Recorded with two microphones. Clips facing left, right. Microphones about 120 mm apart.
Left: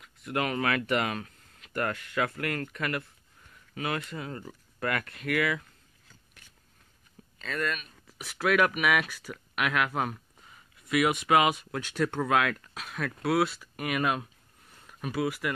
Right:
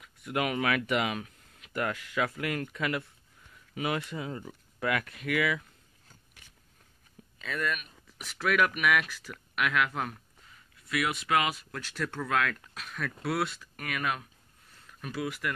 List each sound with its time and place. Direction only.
0.3 s speech: 10° right (ahead or behind)
7.3 s speech: 5° right (ahead or behind)
8.4 s speech: 5° left (ahead or behind)
10.9 s speech: 15° left (ahead or behind)
12.9 s speech: 5° left (ahead or behind)
13.9 s speech: 25° left (ahead or behind)
14.9 s speech: 10° left (ahead or behind)